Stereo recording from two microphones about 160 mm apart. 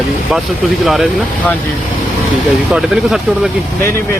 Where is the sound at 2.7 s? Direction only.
Centre (ahead or behind).